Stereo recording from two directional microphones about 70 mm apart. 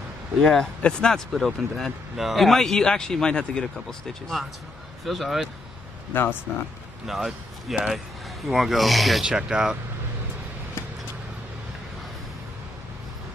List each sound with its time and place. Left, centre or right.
0.4 s a man's voice: centre
6.1 s speech: left
7.1 s a man's voice: centre